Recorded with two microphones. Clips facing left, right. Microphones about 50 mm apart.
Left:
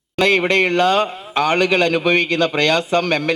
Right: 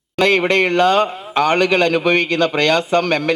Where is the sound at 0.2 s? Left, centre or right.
Centre.